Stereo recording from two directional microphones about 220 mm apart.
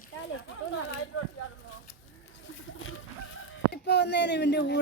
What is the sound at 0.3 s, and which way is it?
Speech, 80° left.